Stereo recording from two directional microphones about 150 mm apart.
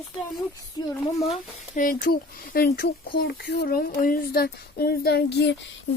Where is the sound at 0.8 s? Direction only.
25° left (ahead or behind).